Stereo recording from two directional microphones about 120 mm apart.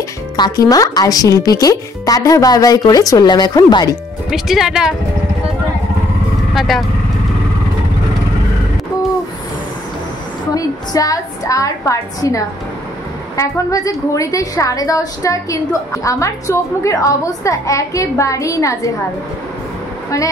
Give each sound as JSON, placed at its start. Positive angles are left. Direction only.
{"t": 0.4, "sound": "speech", "side_deg": 30}
{"t": 4.3, "sound": "speech", "side_deg": -5}
{"t": 6.5, "sound": "speech", "side_deg": 0}
{"t": 10.5, "sound": "a woman's voice", "side_deg": 30}